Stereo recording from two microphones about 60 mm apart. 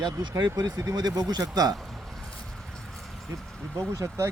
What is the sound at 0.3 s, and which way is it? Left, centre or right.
Speech, right.